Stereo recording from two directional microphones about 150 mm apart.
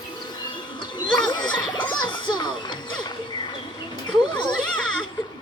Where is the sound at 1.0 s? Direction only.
30° left (ahead or behind).